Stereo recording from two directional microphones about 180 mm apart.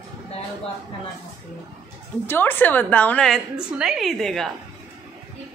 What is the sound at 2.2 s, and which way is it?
A woman's voice, 10° left (ahead or behind).